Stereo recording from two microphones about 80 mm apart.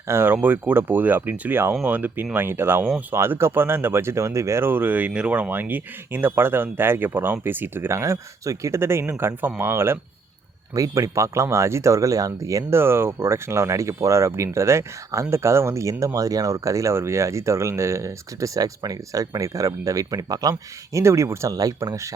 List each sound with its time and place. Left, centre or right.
0.1 s speech: right
10.8 s speech: right
12.7 s speech: right
21.5 s speech: right